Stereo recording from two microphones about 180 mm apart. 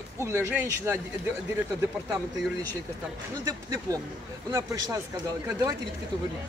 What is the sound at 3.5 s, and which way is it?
Speech, 20° right (ahead or behind).